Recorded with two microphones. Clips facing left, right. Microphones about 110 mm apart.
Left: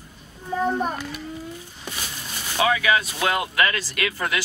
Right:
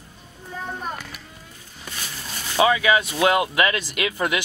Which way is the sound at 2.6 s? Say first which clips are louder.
Right 2 dB; 20° right (ahead or behind).